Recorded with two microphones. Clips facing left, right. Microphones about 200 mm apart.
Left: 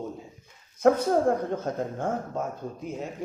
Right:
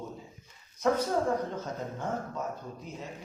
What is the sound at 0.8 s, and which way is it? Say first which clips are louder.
A man's voice: left 6 dB; 50° left (ahead or behind).